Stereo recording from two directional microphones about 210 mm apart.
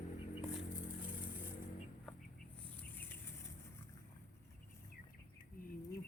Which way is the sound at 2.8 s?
10° left (ahead or behind).